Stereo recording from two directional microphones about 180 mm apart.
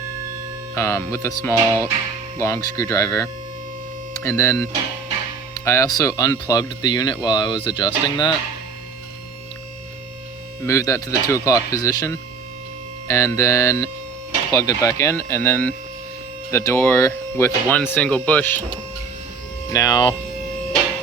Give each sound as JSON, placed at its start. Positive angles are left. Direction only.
{"t": 0.7, "sound": "speech", "side_deg": 15}
{"t": 10.7, "sound": "speech", "side_deg": 20}
{"t": 19.7, "sound": "speech", "side_deg": 20}